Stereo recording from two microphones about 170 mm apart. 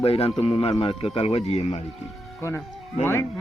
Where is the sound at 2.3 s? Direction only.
15° left (ahead or behind).